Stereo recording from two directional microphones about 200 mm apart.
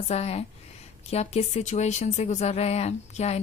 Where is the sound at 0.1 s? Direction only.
30° left (ahead or behind).